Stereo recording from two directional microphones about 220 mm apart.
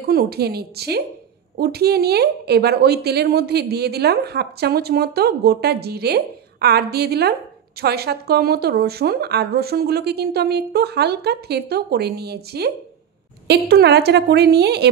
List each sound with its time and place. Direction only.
0.0 s a woman's voice: 45° right (ahead or behind)